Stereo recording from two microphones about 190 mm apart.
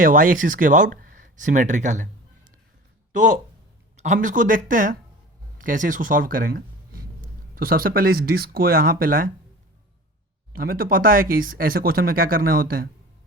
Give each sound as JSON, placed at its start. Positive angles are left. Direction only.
{"t": 0.0, "sound": "speech", "side_deg": -45}
{"t": 3.1, "sound": "speech", "side_deg": -40}
{"t": 10.5, "sound": "speech", "side_deg": -50}